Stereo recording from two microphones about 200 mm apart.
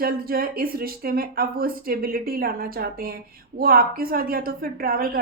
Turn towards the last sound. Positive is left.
turn(degrees=-45)  # may be behind; listen again after turning